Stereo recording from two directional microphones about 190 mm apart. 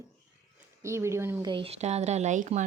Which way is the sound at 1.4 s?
25° right (ahead or behind).